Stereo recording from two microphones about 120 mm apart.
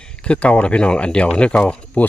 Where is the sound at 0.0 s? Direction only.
10° left (ahead or behind).